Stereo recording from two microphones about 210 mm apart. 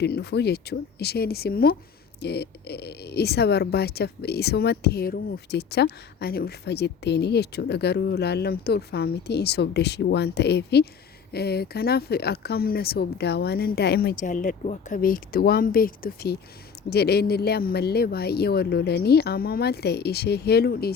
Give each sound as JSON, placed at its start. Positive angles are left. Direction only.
{"t": 0.0, "sound": "speech", "side_deg": 50}